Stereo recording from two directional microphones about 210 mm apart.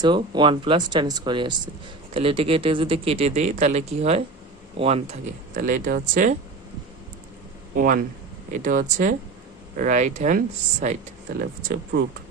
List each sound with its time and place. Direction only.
0.0 s speech: 20° right (ahead or behind); by 6.3 s 40° right (ahead or behind)
7.8 s speech: 40° right (ahead or behind)
11.9 s speech: 45° right (ahead or behind)